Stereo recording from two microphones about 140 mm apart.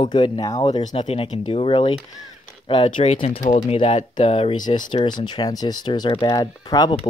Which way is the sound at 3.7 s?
40° left (ahead or behind).